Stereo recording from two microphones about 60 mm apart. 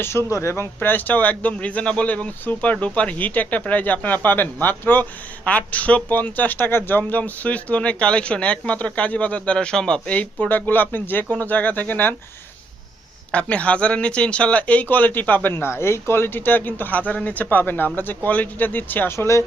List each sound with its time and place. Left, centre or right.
0.0 s speech: left
0.8 s speech: left
10.4 s speech: left
13.3 s speech: left
19.1 s speech: left